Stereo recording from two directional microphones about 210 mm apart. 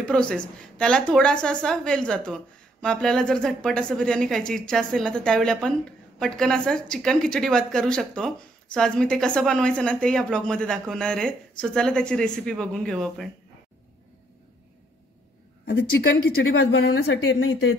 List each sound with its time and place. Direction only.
0.0 s a woman's voice: 5° left (ahead or behind)
16.5 s speech: 70° left (ahead or behind)